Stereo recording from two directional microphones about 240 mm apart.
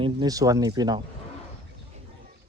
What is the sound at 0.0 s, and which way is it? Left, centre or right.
Speech, centre.